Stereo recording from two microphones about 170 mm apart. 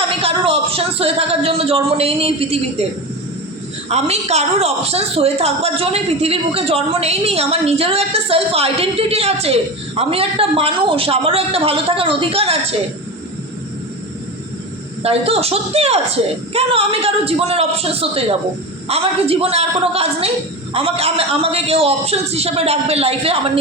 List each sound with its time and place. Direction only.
0.2 s speech: 35° right (ahead or behind)
3.8 s a woman's voice: 40° right (ahead or behind)
15.0 s a woman's voice: 35° right (ahead or behind)